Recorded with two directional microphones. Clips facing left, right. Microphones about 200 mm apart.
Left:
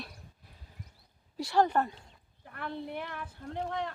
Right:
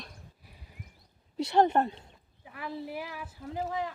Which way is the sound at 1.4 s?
20° right (ahead or behind).